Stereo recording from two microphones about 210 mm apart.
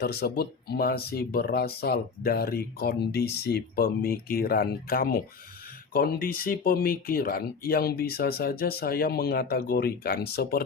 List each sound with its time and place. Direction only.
0.0 s speech: 50° left (ahead or behind)